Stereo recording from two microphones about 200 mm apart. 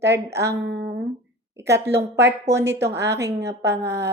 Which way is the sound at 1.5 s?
15° right (ahead or behind).